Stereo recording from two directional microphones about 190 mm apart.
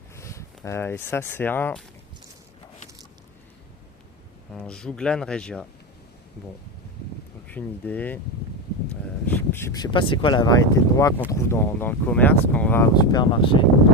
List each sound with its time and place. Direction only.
0.2 s speech: 15° left (ahead or behind)
4.5 s speech: 5° left (ahead or behind)
7.4 s speech: 10° left (ahead or behind)
9.2 s speech: 10° left (ahead or behind)
12.9 s speech: 20° left (ahead or behind)